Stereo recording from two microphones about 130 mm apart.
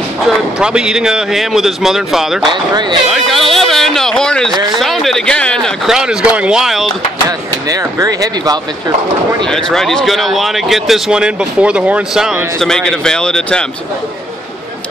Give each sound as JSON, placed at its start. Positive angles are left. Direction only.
{"t": 0.3, "sound": "speech", "side_deg": -5}
{"t": 2.4, "sound": "speech", "side_deg": -35}
{"t": 3.1, "sound": "speech", "side_deg": 0}
{"t": 4.7, "sound": "a sound", "side_deg": 0}
{"t": 5.9, "sound": "speech", "side_deg": -5}
{"t": 7.2, "sound": "speech", "side_deg": -30}
{"t": 9.5, "sound": "speech", "side_deg": 5}